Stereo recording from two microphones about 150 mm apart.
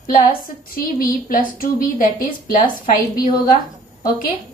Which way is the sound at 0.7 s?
70° left (ahead or behind).